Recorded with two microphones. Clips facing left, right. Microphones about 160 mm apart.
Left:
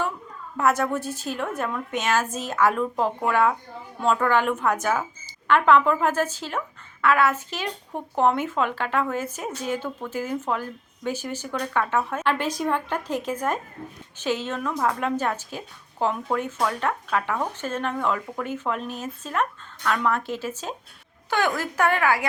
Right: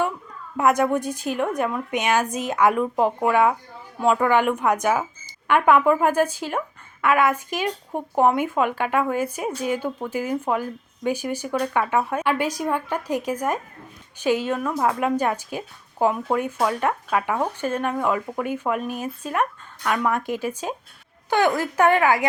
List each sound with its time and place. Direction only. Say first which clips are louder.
0.5 s speech: right 3 dB; 15° right (ahead or behind)